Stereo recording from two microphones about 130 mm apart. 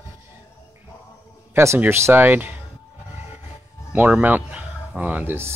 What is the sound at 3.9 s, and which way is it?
Speech, 10° right (ahead or behind).